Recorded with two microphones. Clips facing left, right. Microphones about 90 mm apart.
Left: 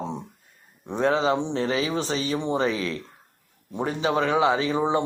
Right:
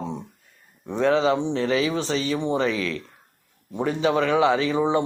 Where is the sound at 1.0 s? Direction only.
25° left (ahead or behind).